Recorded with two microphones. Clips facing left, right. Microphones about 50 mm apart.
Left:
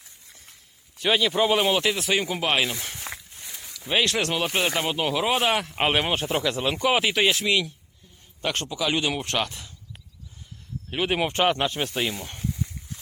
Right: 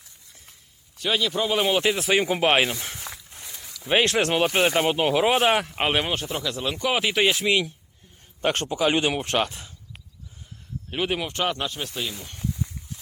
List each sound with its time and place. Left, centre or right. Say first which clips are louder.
0.9 s speech: left 3 dB; centre
1.8 s speech: right 2 dB; centre
3.1 s walk: left 2 dB; centre
3.4 s a sound: even; centre
3.8 s speech: right 3 dB; right
5.7 s speech: left 1 dB; centre
6.1 s speech: left 4 dB; centre
8.4 s speech: right 4 dB; right
9.1 s speech: right 3 dB; centre
10.9 s speech: left 1 dB; centre
11.2 s speech: left 4 dB; left